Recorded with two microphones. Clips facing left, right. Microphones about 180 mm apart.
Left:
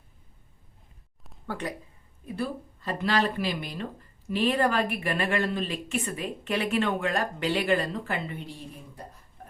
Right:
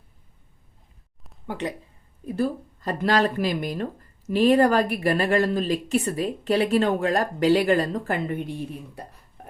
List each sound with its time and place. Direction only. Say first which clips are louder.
1.5 s speech: right 4 dB; 20° right (ahead or behind)
2.2 s speech: right 7 dB; 40° right (ahead or behind); by 9.0 s 60° right (ahead or behind)